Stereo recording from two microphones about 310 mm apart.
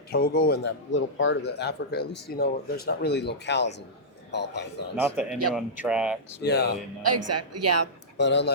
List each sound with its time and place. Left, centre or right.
0.1 s speech: left
4.9 s speech: centre
6.4 s speech: left
7.0 s speech: right
8.2 s speech: left